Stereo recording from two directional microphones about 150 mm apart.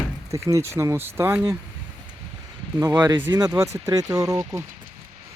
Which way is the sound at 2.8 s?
20° right (ahead or behind).